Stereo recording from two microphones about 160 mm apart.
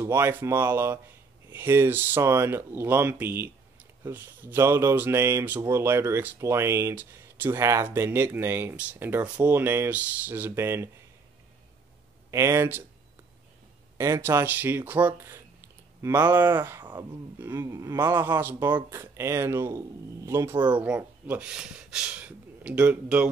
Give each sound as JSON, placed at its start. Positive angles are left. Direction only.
{"t": 0.0, "sound": "speech", "side_deg": -15}
{"t": 12.3, "sound": "speech", "side_deg": -20}
{"t": 13.9, "sound": "speech", "side_deg": -20}